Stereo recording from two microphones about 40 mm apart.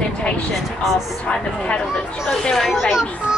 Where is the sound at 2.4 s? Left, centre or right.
Centre.